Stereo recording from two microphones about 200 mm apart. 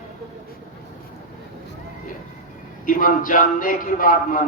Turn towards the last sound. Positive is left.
turn(degrees=45)  # may be behind; listen again after turning